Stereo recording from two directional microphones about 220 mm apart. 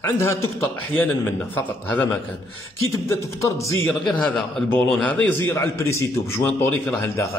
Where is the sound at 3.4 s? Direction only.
15° left (ahead or behind).